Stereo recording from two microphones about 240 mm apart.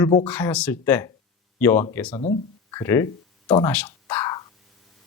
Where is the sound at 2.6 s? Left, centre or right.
Centre.